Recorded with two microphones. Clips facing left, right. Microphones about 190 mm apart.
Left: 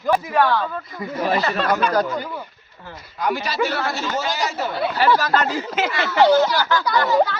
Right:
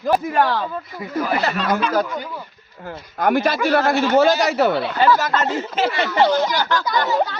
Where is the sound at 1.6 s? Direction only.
55° left (ahead or behind).